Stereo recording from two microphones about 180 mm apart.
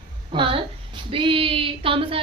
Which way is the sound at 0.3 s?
30° right (ahead or behind).